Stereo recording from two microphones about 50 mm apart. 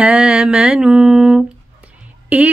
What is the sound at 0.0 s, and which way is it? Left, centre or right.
Mantra, centre.